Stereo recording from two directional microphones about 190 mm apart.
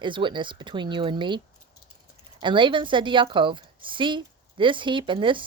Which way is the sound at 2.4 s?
25° right (ahead or behind).